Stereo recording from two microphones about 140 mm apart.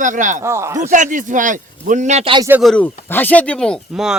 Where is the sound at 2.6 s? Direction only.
10° left (ahead or behind).